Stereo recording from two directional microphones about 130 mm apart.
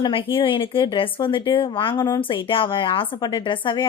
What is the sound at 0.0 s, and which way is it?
A woman's voice, 40° left (ahead or behind).